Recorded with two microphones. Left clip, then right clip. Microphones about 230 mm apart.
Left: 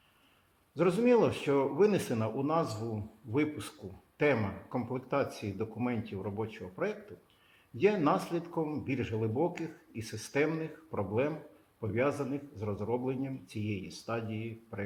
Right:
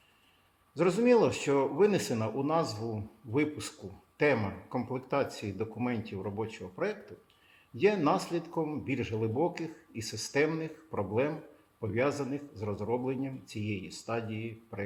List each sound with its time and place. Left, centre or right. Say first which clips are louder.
0.8 s speech: right 1 dB; centre